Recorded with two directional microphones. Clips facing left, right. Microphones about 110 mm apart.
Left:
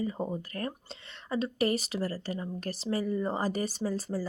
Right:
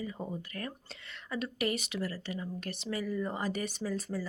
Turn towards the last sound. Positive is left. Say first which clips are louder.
# left 3 dB
turn(degrees=35)  # may be behind; listen again after turning